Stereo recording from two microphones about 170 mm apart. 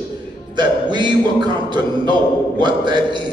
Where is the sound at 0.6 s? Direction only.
25° right (ahead or behind).